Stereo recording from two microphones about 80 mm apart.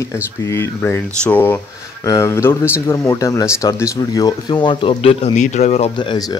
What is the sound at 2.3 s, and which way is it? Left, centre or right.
Speech, left.